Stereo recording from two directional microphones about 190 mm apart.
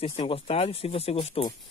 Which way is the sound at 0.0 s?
30° left (ahead or behind).